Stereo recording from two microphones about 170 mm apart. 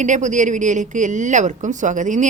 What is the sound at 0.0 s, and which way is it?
Speech, 45° right (ahead or behind).